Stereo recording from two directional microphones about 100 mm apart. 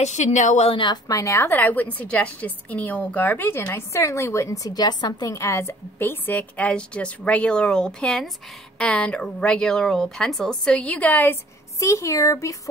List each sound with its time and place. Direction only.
0.7 s speech: 50° left (ahead or behind)
1.1 s speech: 30° left (ahead or behind)
1.5 s a woman's voice: 20° left (ahead or behind)
11.8 s speech: 30° left (ahead or behind)